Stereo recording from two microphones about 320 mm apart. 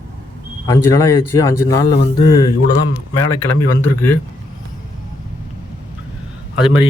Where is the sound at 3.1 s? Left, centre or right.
Left.